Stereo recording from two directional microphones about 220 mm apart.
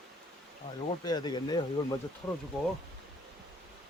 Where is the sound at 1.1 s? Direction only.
20° left (ahead or behind).